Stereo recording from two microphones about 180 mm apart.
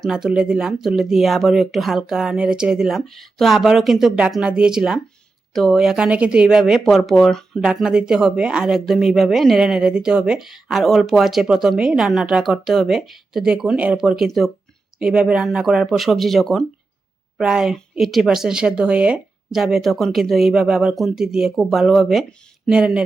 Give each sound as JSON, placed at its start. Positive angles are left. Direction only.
{"t": 0.0, "sound": "speech", "side_deg": -5}